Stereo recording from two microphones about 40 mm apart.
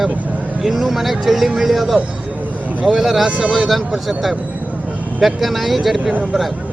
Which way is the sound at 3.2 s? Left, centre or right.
Right.